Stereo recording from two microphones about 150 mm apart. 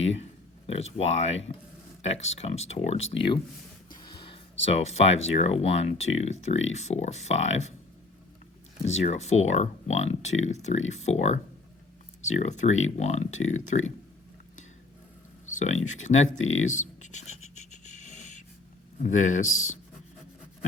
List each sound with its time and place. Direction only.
0.0 s speech: 45° left (ahead or behind)
8.8 s speech: 50° left (ahead or behind)
12.4 s speech: 50° left (ahead or behind)
15.4 s speech: 50° left (ahead or behind)
18.0 s wheeze: 55° left (ahead or behind)
18.9 s speech: 55° left (ahead or behind)